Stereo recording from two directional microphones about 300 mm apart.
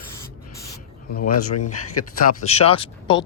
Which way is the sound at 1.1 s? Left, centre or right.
Left.